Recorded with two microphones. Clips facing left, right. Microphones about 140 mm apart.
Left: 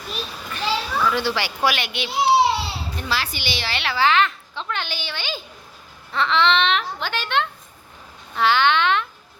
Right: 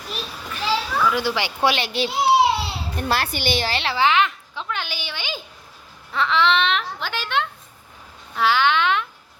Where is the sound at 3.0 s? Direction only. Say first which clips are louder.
Right 5 dB; 55° right (ahead or behind).